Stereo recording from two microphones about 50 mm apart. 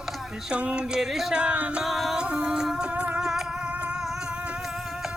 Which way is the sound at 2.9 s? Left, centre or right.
Right.